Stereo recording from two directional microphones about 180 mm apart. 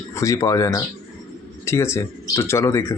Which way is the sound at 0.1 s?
15° left (ahead or behind).